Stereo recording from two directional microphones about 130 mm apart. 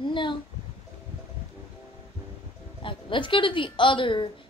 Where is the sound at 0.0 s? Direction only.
40° left (ahead or behind).